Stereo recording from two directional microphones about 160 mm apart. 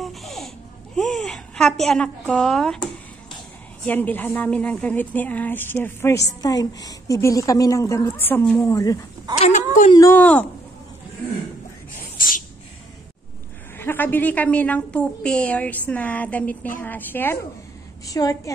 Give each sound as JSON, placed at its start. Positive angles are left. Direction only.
{"t": 0.0, "sound": "laughter", "side_deg": 0}
{"t": 0.9, "sound": "a sound", "side_deg": 0}
{"t": 3.8, "sound": "a woman's voice", "side_deg": 10}
{"t": 9.4, "sound": "a woman's voice", "side_deg": 50}
{"t": 10.1, "sound": "a woman's voice", "side_deg": 10}
{"t": 12.0, "sound": "a sound", "side_deg": 60}
{"t": 13.7, "sound": "a woman's voice", "side_deg": 15}